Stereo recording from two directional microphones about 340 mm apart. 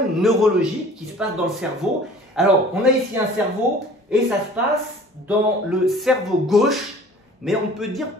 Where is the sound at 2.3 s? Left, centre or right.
Centre.